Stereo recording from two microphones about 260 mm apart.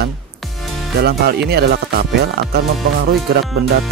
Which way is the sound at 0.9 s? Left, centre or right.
Right.